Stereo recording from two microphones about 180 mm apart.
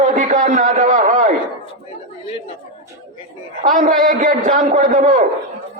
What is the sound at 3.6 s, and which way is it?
A man's voice, 45° right (ahead or behind).